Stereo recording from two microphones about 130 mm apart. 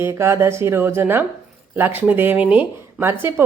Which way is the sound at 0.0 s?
20° right (ahead or behind).